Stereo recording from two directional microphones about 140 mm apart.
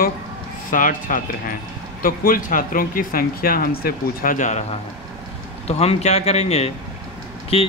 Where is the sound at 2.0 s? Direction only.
90° left; by 4.6 s 60° left (ahead or behind).